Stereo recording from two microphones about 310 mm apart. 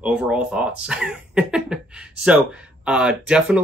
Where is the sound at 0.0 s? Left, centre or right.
Centre.